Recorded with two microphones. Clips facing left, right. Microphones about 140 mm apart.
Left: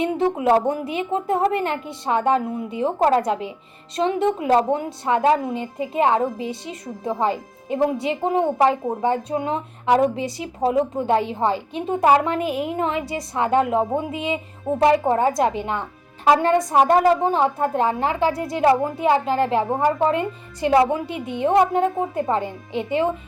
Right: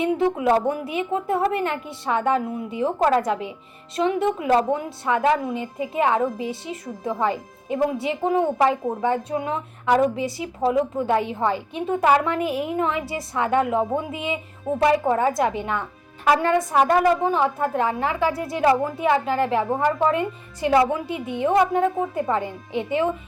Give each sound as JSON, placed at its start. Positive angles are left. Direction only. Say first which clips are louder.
{"t": 0.0, "sound": "a woman's voice", "louder": "even", "side_deg": 25}